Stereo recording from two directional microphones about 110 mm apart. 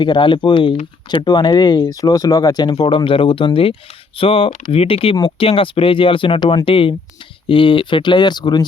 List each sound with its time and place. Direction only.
0.0 s speech: 45° left (ahead or behind)
2.8 s speech: 55° left (ahead or behind)